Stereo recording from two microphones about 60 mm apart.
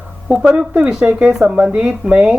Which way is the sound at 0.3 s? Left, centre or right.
Centre.